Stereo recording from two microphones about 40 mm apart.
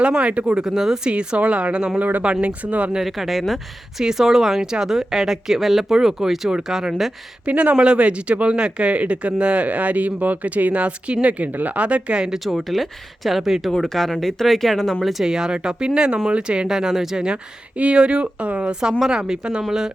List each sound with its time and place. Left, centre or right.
0.2 s speech: right
0.6 s a woman's voice: centre
1.0 s speech: right
1.4 s speech: right
2.0 s speech: right
3.0 s speech: centre
3.9 s a woman's voice: centre
7.4 s speech: right
12.5 s speech: centre
13.7 s speech: centre
15.2 s a woman's voice: centre
16.6 s a woman's voice: centre
17.7 s speech: right